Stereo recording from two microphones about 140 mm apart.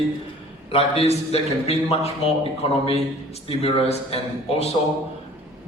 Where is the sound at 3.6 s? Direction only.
45° left (ahead or behind).